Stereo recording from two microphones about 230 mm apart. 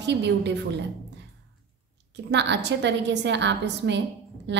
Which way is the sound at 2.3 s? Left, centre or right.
Right.